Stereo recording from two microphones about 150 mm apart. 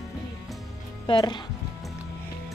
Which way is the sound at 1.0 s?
30° left (ahead or behind).